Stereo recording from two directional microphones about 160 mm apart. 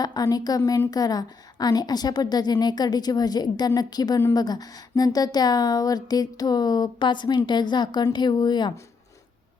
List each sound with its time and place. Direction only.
0.0 s a woman's voice: 25° left (ahead or behind)